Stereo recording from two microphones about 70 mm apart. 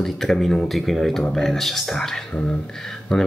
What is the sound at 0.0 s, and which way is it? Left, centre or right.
Speech, centre.